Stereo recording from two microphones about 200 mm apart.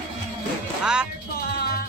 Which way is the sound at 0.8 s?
5° right (ahead or behind).